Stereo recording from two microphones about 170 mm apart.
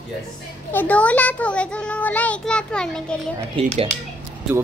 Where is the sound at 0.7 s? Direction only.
10° left (ahead or behind).